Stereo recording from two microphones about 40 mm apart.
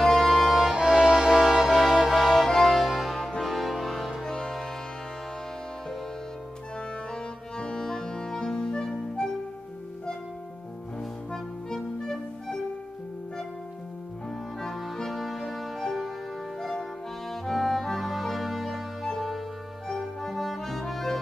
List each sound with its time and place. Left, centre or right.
0.0 s accordion: centre
0.7 s music: centre
7.1 s music: centre
11.0 s music: centre
14.6 s music: centre
17.3 s music: centre